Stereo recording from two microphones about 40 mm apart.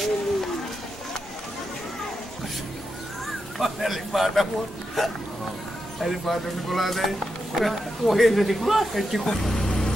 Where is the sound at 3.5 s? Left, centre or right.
Centre.